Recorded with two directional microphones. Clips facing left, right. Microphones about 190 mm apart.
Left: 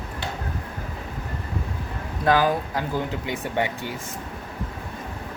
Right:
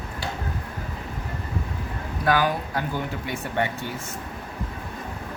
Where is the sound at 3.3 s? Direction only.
15° left (ahead or behind).